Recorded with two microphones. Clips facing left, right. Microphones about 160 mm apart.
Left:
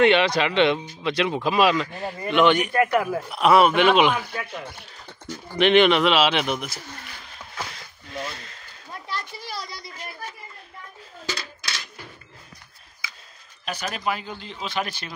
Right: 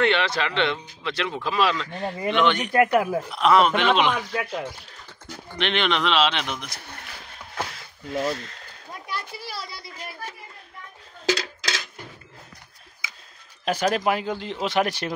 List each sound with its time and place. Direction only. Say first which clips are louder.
0.0 s speech: left 4 dB; 15° left (ahead or behind)
2.7 s speech: right 2 dB; 20° right (ahead or behind)
3.3 s speech: left 4 dB; 10° left (ahead or behind)
5.6 s speech: left 7 dB; 10° left (ahead or behind)
7.7 s a sound: right 6 dB; 5° right (ahead or behind)
8.9 s children playing: even; 10° right (ahead or behind)
11.2 s a sound: right 8 dB; 85° right
13.7 s speech: right 6 dB; 90° right; by 15.1 s 75° right (ahead or behind)